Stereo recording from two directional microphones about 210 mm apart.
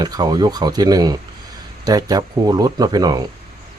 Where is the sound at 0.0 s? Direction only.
20° right (ahead or behind).